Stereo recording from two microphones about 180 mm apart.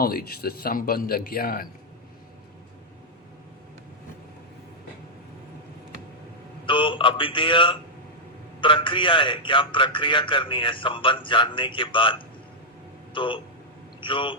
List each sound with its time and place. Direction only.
0.0 s speech: 60° left (ahead or behind)
6.7 s a man's voice: 30° left (ahead or behind)
13.1 s a man's voice: 25° left (ahead or behind)